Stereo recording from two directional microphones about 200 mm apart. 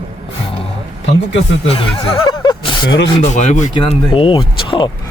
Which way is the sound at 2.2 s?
20° left (ahead or behind).